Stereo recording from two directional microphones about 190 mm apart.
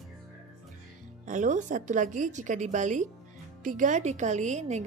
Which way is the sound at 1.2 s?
40° right (ahead or behind).